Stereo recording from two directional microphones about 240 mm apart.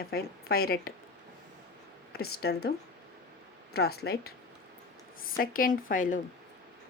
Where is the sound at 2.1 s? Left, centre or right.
Left.